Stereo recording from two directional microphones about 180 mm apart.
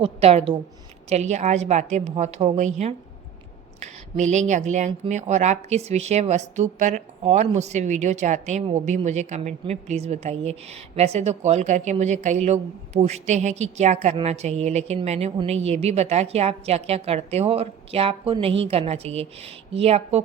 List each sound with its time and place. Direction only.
0.0 s a woman's voice: 35° right (ahead or behind)